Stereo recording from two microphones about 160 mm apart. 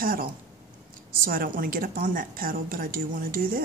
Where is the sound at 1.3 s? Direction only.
60° right (ahead or behind).